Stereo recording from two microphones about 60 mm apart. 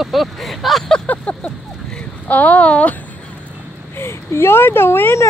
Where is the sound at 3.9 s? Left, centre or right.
Left.